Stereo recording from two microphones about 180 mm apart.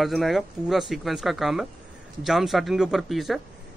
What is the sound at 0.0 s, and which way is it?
Speech, centre (ahead or behind).